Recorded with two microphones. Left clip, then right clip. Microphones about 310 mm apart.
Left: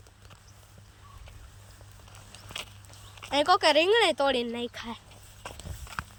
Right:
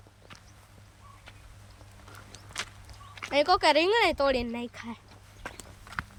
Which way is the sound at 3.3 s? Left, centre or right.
Centre.